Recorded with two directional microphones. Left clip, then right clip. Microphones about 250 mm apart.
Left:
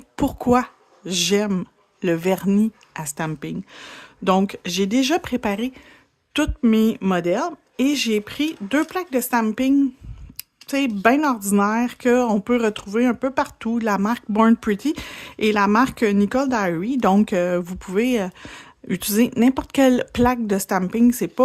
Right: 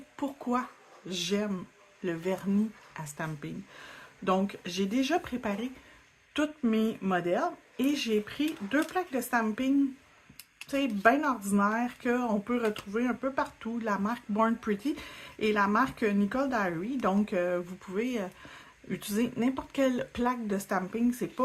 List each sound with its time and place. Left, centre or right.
0.2 s speech: left